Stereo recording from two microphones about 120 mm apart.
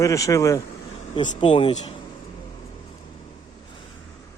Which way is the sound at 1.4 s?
45° left (ahead or behind).